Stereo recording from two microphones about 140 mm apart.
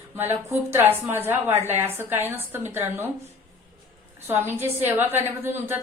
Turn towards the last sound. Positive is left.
turn(degrees=-15)  # may be behind; listen again after turning